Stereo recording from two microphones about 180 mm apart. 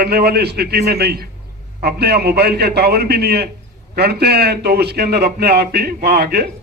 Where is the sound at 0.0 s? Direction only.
60° right (ahead or behind).